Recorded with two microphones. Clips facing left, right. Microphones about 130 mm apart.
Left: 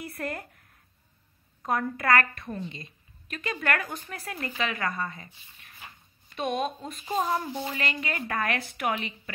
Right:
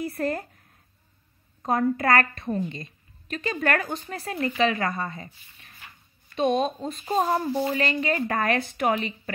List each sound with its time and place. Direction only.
0.0 s speech: 30° right (ahead or behind)
1.6 s a woman's voice: 30° right (ahead or behind)
6.3 s a woman's voice: 25° right (ahead or behind)